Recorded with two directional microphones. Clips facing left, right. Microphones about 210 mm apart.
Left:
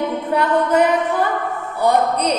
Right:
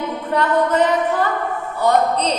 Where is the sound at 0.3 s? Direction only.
10° left (ahead or behind).